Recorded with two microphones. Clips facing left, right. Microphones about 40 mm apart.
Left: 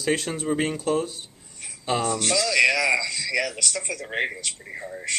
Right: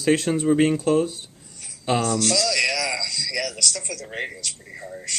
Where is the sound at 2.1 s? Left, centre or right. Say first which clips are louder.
Even; left.